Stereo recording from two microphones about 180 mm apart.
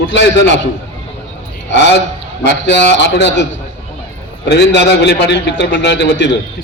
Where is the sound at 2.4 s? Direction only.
75° left (ahead or behind).